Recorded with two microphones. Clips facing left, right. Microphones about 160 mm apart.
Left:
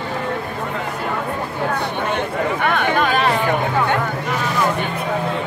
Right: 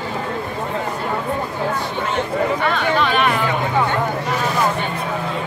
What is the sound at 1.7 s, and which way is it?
Chatter, 60° left (ahead or behind).